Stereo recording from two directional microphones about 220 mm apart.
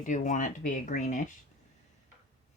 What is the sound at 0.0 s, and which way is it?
Speech, 35° left (ahead or behind).